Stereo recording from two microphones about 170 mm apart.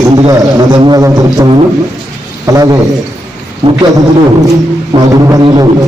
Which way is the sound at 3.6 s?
30° right (ahead or behind).